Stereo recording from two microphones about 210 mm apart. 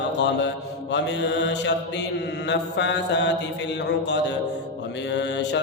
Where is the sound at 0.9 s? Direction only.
55° left (ahead or behind).